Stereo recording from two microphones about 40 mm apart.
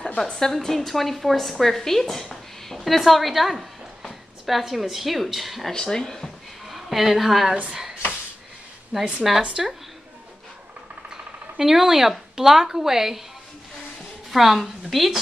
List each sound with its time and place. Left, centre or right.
0.2 s a woman's voice: centre
5.7 s speech: centre
6.7 s a woman's voice: centre
8.9 s a woman's voice: centre
9.6 s speech: centre
11.1 s speech: centre
14.3 s a woman's voice: centre